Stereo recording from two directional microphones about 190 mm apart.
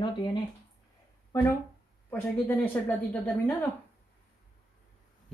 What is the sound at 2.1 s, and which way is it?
Speech, 10° left (ahead or behind).